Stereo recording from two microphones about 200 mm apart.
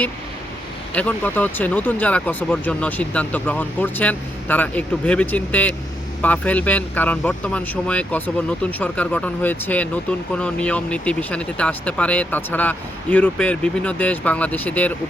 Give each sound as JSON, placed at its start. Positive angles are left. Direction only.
{"t": 0.9, "sound": "speech", "side_deg": 5}